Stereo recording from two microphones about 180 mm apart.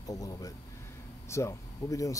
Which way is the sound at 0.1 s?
20° left (ahead or behind).